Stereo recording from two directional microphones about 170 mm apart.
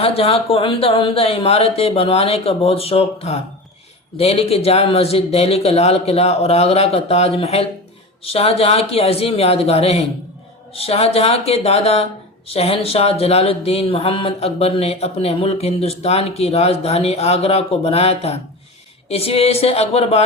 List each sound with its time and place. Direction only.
0.0 s speech: 35° left (ahead or behind)